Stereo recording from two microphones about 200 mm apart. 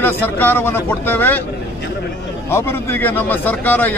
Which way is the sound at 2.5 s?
10° left (ahead or behind).